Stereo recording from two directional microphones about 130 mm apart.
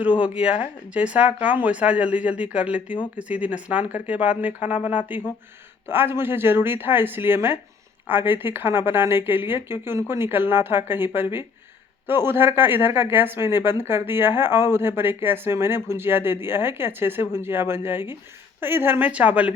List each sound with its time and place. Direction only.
0.2 s speech: 10° right (ahead or behind)